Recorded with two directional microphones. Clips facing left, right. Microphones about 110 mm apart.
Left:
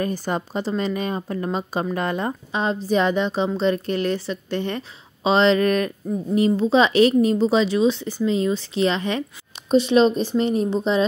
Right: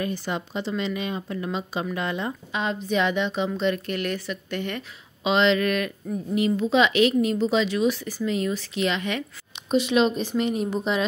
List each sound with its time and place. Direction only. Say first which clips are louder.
0.0 s a woman's voice: left 4 dB; 40° left (ahead or behind)